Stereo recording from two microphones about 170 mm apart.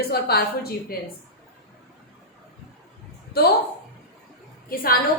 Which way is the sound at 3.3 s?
70° left (ahead or behind).